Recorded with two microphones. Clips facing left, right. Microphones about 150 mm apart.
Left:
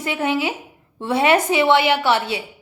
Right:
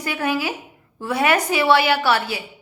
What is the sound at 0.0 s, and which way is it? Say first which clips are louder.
A woman's voice: left 2 dB; 25° left (ahead or behind).